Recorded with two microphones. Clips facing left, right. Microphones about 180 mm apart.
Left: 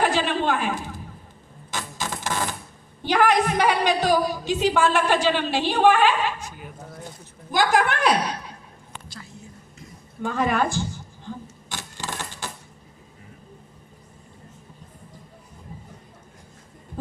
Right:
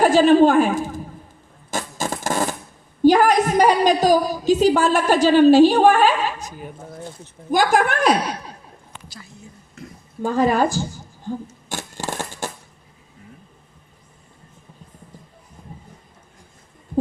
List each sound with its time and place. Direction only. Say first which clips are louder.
0.0 s a woman's voice: right 10 dB; 45° right (ahead or behind)
1.7 s a sound: right 5 dB; 45° right (ahead or behind)
3.0 s a woman's voice: right 6 dB; 45° right (ahead or behind)
7.5 s a woman's voice: right 3 dB; 50° right (ahead or behind)
10.2 s camera: right 5 dB; 35° right (ahead or behind)